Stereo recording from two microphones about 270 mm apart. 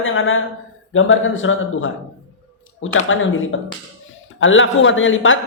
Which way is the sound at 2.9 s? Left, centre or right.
Left.